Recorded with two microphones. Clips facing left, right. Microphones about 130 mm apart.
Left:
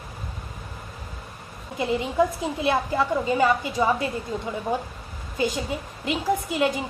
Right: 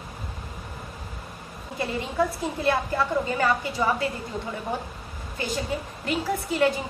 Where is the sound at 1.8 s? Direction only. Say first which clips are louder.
Left 4 dB; 15° left (ahead or behind).